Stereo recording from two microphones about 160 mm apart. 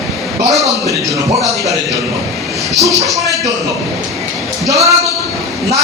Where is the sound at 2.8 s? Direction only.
20° right (ahead or behind).